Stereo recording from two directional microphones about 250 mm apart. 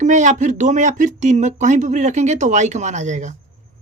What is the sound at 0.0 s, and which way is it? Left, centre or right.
A woman's voice, right.